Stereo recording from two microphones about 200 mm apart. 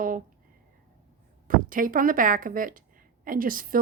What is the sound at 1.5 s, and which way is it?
A woman's voice, 45° right (ahead or behind).